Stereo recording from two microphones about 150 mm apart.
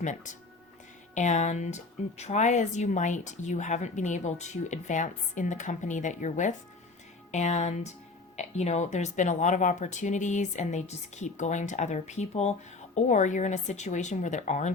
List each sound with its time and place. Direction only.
0.0 s speech: 55° left (ahead or behind)